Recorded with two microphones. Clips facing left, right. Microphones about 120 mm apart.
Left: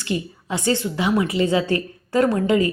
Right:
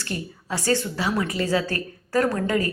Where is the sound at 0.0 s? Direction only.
15° left (ahead or behind).